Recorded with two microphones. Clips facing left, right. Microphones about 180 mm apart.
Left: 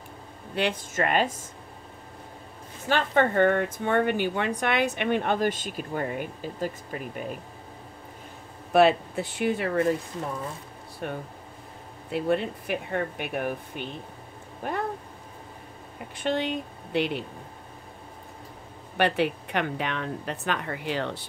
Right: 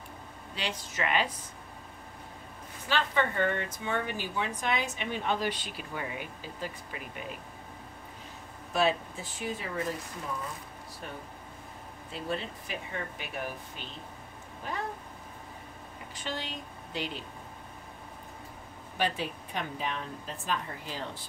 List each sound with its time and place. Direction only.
0.6 s speech: 55° left (ahead or behind)
2.9 s speech: 50° left (ahead or behind)
8.7 s speech: 65° left (ahead or behind)
11.0 s speech: 60° left (ahead or behind)
16.2 s speech: 60° left (ahead or behind)
18.9 s speech: 70° left (ahead or behind)